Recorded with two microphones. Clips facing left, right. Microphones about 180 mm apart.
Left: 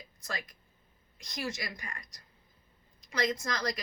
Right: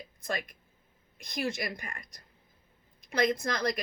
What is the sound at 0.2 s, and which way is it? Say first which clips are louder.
A woman's voice: right 5 dB; 55° right (ahead or behind).